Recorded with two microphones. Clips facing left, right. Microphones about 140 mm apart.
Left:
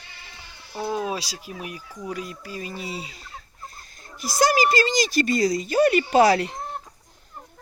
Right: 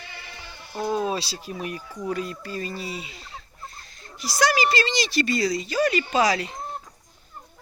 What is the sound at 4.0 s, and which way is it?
A woman's voice, 50° left (ahead or behind).